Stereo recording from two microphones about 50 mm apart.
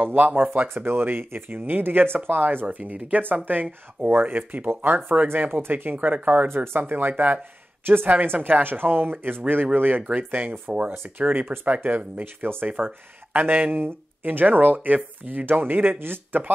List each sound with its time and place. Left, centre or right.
0.0 s speech: right
5.3 s speech: right
6.5 s speech: right